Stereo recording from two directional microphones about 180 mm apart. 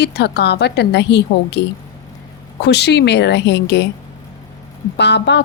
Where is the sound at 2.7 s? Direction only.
70° left (ahead or behind).